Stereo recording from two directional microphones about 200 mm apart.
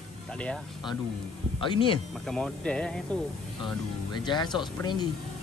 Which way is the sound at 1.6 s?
25° left (ahead or behind).